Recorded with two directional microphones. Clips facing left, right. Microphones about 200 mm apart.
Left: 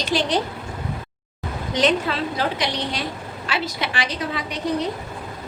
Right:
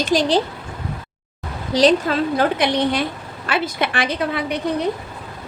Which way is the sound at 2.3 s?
55° right (ahead or behind).